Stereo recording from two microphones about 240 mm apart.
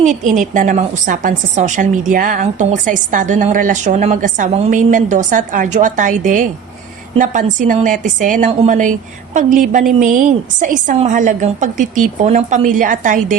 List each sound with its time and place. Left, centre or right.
0.0 s a woman's voice: right